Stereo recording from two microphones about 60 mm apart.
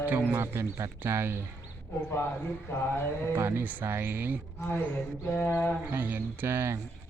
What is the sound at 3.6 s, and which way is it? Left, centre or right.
Speech, right.